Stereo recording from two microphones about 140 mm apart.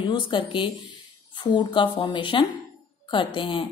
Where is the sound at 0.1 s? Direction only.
35° left (ahead or behind).